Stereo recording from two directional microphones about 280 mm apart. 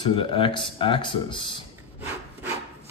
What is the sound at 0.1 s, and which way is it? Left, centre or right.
Speech, centre.